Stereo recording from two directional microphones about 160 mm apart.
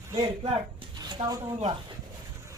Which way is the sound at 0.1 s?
30° right (ahead or behind).